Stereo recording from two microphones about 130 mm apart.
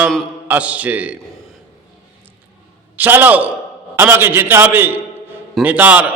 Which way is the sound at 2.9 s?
15° right (ahead or behind).